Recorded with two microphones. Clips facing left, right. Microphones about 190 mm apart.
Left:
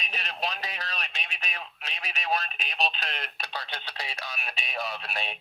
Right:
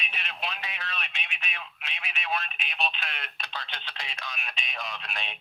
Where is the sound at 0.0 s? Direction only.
40° left (ahead or behind).